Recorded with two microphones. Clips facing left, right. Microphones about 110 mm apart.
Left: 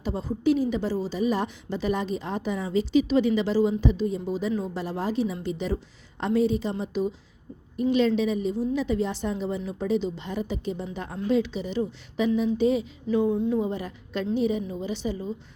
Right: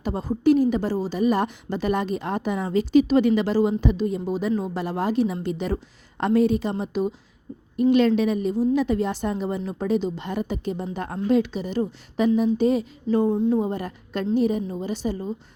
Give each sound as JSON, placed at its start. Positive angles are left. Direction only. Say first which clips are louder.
{"t": 0.0, "sound": "a woman's voice", "louder": "right 4 dB", "side_deg": -50}